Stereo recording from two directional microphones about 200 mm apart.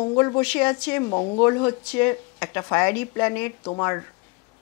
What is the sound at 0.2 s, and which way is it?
Speech, 10° left (ahead or behind).